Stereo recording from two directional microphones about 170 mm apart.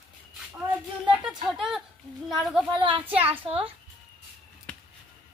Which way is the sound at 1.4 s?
Centre (ahead or behind).